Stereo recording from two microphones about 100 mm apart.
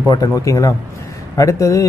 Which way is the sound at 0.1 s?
35° left (ahead or behind).